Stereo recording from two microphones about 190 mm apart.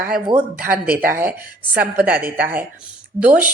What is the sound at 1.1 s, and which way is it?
Speech, 15° right (ahead or behind).